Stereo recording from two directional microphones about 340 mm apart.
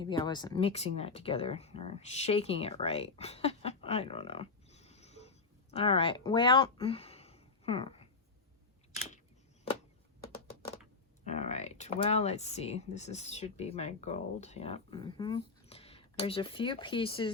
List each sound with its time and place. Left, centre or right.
0.0 s speech: centre
11.3 s speech: left